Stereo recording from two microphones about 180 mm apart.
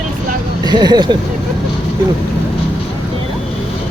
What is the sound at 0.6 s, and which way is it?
Speech, 25° right (ahead or behind).